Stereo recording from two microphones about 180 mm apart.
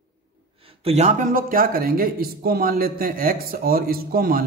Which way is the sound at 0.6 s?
30° right (ahead or behind).